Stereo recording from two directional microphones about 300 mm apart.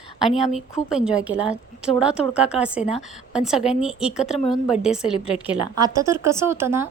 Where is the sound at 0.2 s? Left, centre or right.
Centre.